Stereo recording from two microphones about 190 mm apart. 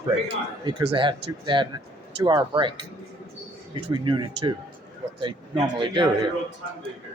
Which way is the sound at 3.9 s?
25° right (ahead or behind).